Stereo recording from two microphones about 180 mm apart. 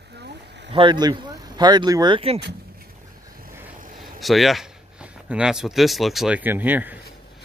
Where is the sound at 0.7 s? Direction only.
25° right (ahead or behind).